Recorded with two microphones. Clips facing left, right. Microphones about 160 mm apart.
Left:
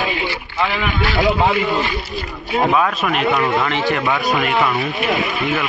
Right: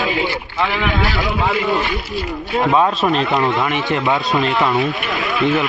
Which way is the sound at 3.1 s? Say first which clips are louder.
Right 1 dB; 25° right (ahead or behind).